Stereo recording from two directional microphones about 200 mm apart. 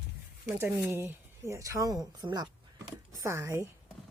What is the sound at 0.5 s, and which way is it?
A woman's voice, 15° right (ahead or behind).